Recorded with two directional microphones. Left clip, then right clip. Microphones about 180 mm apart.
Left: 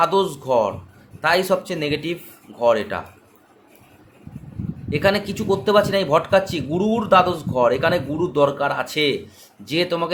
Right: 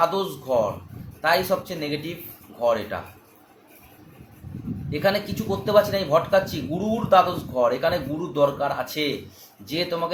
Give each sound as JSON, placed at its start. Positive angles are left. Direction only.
{"t": 0.0, "sound": "speech", "side_deg": 50}
{"t": 4.9, "sound": "speech", "side_deg": 50}